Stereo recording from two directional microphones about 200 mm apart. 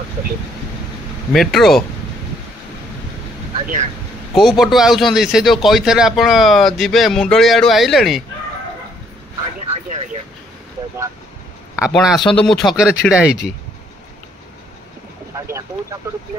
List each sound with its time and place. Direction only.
1.3 s a man's voice: centre (ahead or behind)
4.4 s a man's voice: centre (ahead or behind)
9.7 s vehicle: 35° right (ahead or behind)
11.7 s a man's voice: 5° right (ahead or behind)
15.3 s vehicle: 15° right (ahead or behind)